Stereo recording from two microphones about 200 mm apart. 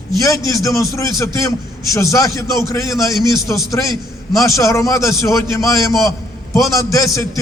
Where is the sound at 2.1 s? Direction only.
15° left (ahead or behind).